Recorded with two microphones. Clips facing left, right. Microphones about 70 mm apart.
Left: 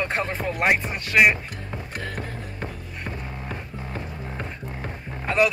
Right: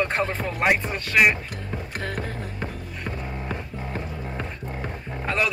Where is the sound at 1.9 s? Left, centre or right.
Right.